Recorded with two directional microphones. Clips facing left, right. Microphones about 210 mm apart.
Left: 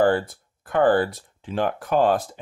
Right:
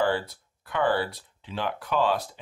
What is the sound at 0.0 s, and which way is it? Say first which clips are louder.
Speech: left 6 dB; 50° left (ahead or behind).